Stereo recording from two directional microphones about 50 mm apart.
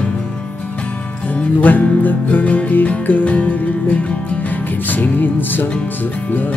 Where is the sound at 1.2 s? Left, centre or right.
Left.